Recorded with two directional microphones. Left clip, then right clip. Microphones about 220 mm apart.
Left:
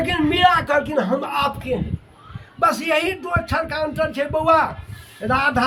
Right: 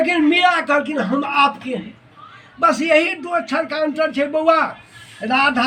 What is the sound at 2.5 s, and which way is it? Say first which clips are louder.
A man's voice: right 4 dB; 25° left (ahead or behind).